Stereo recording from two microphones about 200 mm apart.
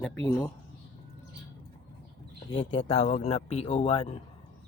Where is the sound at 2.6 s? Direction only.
70° left (ahead or behind).